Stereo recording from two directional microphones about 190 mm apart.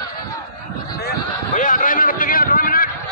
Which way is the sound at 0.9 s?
50° left (ahead or behind).